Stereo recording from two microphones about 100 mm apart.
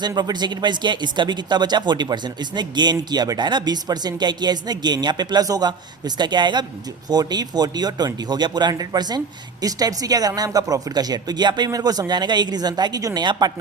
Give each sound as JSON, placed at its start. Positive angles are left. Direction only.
{"t": 0.1, "sound": "speech", "side_deg": -45}